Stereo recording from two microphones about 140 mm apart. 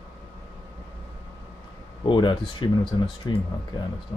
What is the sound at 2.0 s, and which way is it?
Speech, 35° left (ahead or behind).